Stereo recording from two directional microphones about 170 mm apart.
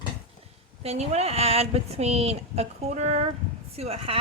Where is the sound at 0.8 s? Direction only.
40° right (ahead or behind).